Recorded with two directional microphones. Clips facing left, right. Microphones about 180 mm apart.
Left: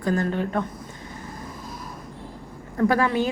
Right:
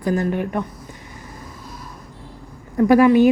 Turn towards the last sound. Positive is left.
turn(degrees=-15)  # may be behind; listen again after turning